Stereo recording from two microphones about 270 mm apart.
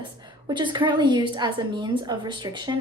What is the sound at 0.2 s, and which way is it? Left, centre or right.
A woman's voice, centre.